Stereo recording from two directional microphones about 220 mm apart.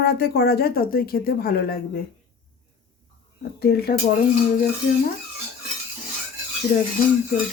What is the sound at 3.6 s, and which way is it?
Speech, 45° left (ahead or behind).